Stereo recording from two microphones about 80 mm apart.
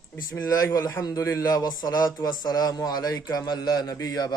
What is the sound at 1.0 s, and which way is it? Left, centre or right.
A man's voice, left.